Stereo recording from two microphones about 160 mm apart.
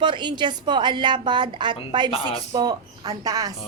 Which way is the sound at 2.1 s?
35° left (ahead or behind).